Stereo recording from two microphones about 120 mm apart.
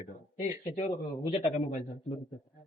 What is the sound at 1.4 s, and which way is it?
Speech, 85° left.